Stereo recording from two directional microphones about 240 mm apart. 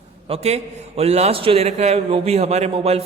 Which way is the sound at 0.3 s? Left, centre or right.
Right.